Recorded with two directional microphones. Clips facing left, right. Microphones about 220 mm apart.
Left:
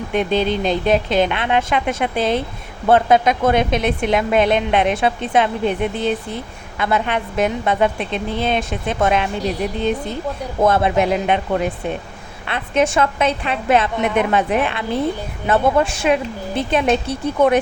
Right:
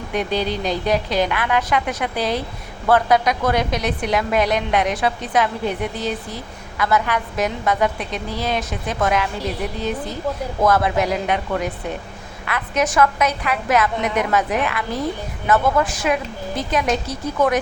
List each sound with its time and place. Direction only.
0.1 s a woman's voice: 25° left (ahead or behind)
10.6 s a woman's voice: 25° left (ahead or behind)